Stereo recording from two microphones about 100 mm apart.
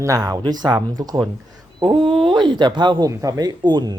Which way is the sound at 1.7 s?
55° right (ahead or behind).